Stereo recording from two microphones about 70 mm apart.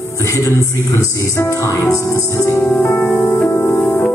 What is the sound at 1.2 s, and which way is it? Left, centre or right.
Music, left.